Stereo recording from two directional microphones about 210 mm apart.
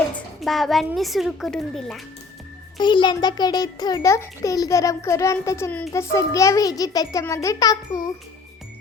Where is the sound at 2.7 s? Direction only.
20° left (ahead or behind).